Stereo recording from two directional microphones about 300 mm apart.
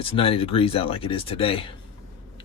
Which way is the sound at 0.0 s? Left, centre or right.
Centre.